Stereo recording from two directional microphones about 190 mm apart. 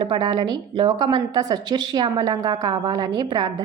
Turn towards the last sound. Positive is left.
turn(degrees=-20)  # may be behind; listen again after turning